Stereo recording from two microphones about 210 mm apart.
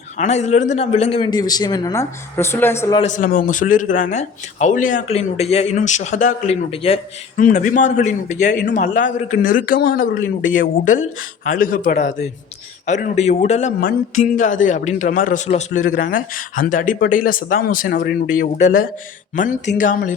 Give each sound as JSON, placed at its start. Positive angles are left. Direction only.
{"t": 0.2, "sound": "speech", "side_deg": 35}
{"t": 3.0, "sound": "a man's voice", "side_deg": 35}
{"t": 7.3, "sound": "a man's voice", "side_deg": 40}